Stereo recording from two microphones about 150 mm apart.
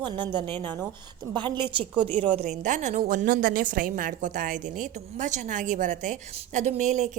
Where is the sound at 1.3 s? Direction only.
30° right (ahead or behind).